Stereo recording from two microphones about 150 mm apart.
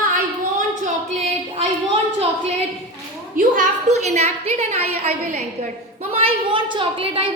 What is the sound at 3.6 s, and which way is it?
A woman's voice, 50° right (ahead or behind).